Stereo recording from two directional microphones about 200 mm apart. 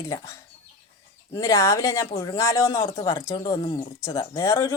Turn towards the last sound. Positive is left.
turn(degrees=15)  # may be behind; listen again after turning